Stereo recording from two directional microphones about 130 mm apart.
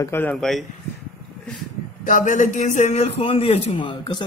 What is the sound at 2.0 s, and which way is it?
A man's voice, 85° left.